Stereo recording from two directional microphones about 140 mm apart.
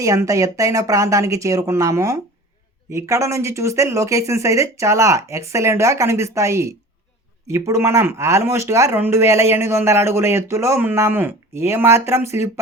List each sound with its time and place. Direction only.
0.0 s speech: 25° right (ahead or behind)